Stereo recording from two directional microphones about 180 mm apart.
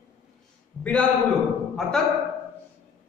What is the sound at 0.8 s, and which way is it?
Speech, 10° left (ahead or behind).